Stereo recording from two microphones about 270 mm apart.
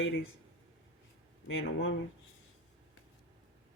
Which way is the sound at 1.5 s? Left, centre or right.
Left.